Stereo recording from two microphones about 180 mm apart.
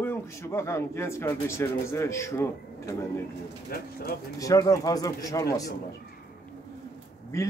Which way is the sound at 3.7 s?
55° left (ahead or behind).